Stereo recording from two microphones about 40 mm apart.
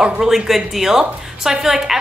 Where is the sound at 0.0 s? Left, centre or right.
Centre.